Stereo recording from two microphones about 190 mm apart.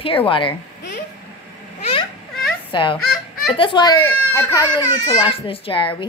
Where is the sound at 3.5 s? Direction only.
25° left (ahead or behind).